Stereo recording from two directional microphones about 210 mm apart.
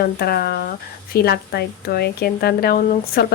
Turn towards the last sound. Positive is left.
turn(degrees=45)  # may be behind; listen again after turning